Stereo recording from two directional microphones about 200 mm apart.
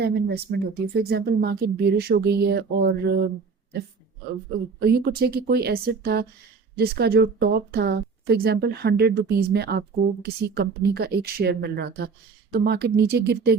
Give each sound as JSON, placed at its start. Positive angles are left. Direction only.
{"t": 0.0, "sound": "speech", "side_deg": -55}
{"t": 4.8, "sound": "speech", "side_deg": -50}